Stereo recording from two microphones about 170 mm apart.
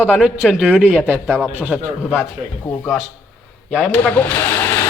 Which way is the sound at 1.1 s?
5° left (ahead or behind).